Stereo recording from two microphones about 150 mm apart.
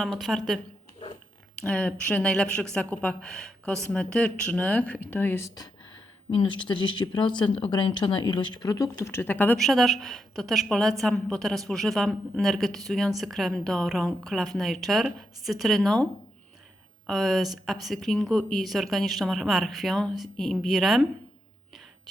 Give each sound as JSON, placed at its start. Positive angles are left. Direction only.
{"t": 0.0, "sound": "a woman's voice", "side_deg": 0}
{"t": 6.3, "sound": "speech", "side_deg": 35}
{"t": 9.6, "sound": "a woman's voice", "side_deg": 0}
{"t": 17.1, "sound": "a woman's voice", "side_deg": 0}